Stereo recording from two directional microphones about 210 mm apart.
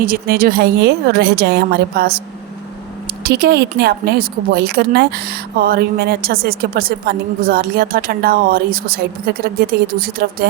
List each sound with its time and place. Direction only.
0.0 s a woman's voice: 45° right (ahead or behind)
3.2 s a woman's voice: 50° right (ahead or behind)